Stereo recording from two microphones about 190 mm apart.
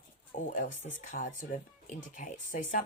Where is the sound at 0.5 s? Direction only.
40° left (ahead or behind).